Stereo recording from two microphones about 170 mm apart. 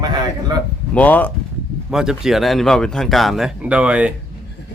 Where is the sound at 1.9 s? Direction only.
5° right (ahead or behind).